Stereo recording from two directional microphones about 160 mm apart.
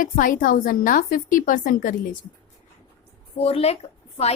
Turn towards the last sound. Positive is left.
turn(degrees=40)  # may be behind; listen again after turning